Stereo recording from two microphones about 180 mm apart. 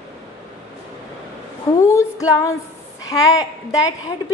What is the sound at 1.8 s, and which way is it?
A woman's voice, 15° left (ahead or behind).